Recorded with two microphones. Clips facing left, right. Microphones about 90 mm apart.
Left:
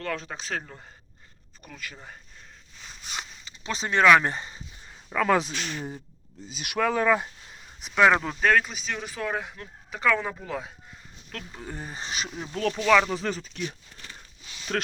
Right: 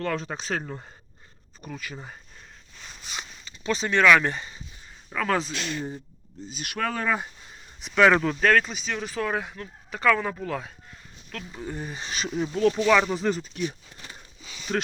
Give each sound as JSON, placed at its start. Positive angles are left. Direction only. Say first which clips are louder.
{"t": 0.0, "sound": "speech", "louder": "right 3 dB", "side_deg": -35}
{"t": 3.4, "sound": "speech", "louder": "right 6 dB", "side_deg": 20}
{"t": 5.1, "sound": "speech", "louder": "left 3 dB", "side_deg": 5}
{"t": 8.6, "sound": "speech", "louder": "right 2 dB", "side_deg": 5}
{"t": 11.3, "sound": "speech", "louder": "right 3 dB", "side_deg": 40}
{"t": 12.5, "sound": "speech", "louder": "right 1 dB", "side_deg": -10}
{"t": 13.9, "sound": "speech", "louder": "right 1 dB", "side_deg": -15}